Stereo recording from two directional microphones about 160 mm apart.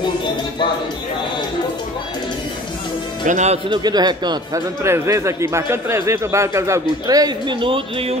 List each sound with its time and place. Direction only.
3.3 s speech: 45° right (ahead or behind)
3.6 s a man's voice: 25° right (ahead or behind)